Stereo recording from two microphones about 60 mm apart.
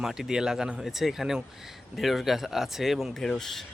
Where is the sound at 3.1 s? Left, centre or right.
Centre.